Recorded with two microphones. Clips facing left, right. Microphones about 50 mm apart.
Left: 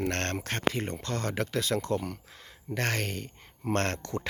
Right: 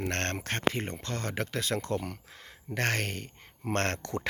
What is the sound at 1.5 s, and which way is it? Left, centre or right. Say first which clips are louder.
Speech: left 3 dB; right.